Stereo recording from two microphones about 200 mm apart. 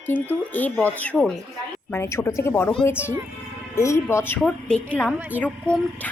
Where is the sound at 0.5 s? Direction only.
10° left (ahead or behind).